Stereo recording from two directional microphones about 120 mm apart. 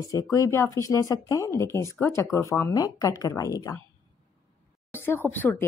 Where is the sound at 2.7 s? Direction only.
30° left (ahead or behind).